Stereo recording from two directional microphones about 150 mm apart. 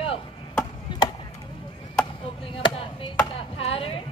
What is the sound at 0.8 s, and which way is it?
Chop, 30° left (ahead or behind).